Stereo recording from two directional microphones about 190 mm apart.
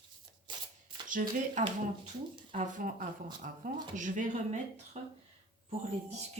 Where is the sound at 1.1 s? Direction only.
45° right (ahead or behind).